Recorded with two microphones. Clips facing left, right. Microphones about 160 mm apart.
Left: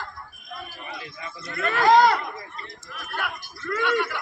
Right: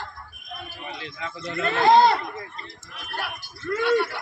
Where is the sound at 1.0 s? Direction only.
80° right.